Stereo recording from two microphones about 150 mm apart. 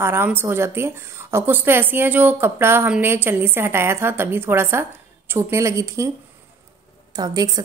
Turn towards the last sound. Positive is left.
turn(degrees=-25)  # may be behind; listen again after turning